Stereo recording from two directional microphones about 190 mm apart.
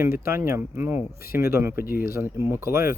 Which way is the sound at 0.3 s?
15° right (ahead or behind).